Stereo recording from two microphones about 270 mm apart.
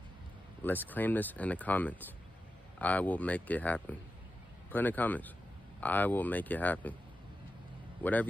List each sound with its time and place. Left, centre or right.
0.7 s speech: centre
8.0 s a man's voice: centre